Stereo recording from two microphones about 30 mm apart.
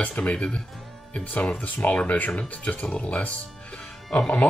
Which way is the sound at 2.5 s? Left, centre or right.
Left.